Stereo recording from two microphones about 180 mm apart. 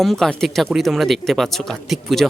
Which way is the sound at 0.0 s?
Centre (ahead or behind).